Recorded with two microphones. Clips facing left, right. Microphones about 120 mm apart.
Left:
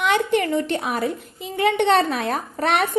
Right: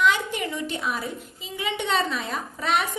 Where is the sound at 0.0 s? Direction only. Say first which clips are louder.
Left 4 dB; 60° left (ahead or behind).